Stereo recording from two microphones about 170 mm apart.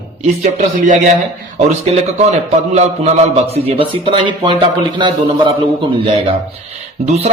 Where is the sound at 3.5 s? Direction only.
35° right (ahead or behind).